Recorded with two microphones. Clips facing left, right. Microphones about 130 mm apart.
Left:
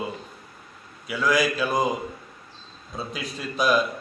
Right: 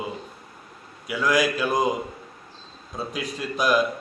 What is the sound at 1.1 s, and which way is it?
Speech, 10° right (ahead or behind).